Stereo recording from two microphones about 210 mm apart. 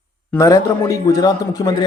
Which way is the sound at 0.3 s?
15° left (ahead or behind).